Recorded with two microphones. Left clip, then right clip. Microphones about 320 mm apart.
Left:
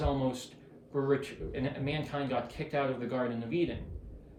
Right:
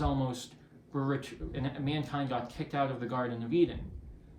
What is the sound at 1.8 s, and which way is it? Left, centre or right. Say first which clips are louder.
Speech: even; centre.